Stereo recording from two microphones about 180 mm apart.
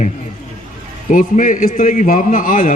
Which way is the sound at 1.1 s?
45° left (ahead or behind).